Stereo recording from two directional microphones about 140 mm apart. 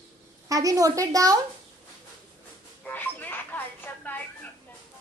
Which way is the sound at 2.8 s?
10° left (ahead or behind).